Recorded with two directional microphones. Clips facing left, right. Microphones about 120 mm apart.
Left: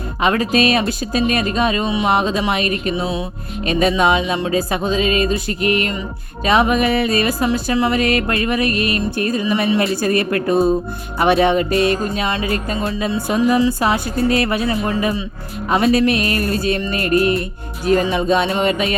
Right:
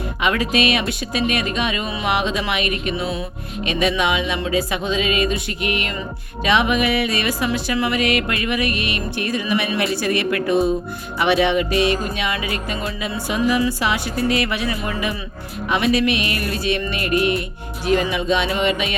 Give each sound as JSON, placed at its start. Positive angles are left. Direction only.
{"t": 0.2, "sound": "speech", "side_deg": 40}
{"t": 9.4, "sound": "speech", "side_deg": 30}
{"t": 9.9, "sound": "speech", "side_deg": 45}
{"t": 13.2, "sound": "speech", "side_deg": 45}